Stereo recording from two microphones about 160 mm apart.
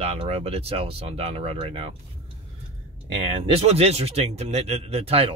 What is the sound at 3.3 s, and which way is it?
Speech, 35° right (ahead or behind).